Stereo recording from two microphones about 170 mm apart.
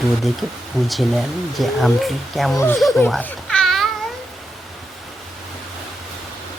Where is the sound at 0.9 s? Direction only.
Centre (ahead or behind).